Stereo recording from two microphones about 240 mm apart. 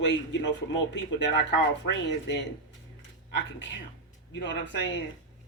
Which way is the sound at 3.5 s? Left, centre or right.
Left.